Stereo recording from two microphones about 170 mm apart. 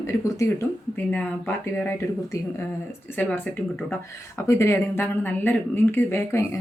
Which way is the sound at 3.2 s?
10° left (ahead or behind).